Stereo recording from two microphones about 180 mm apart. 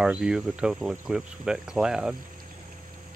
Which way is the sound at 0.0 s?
5° right (ahead or behind).